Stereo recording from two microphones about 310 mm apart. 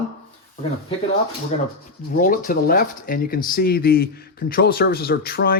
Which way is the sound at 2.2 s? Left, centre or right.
Left.